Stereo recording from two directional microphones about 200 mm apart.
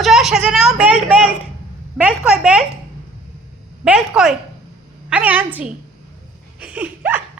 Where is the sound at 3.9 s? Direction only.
Centre (ahead or behind).